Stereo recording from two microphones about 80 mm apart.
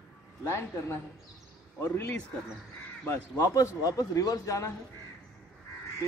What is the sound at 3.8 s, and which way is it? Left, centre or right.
Speech, left.